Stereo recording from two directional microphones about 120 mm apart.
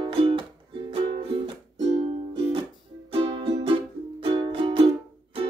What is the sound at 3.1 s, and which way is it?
Music, 55° right (ahead or behind).